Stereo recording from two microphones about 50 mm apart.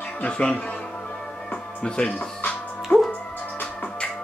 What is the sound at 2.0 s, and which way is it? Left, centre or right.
Speech, left.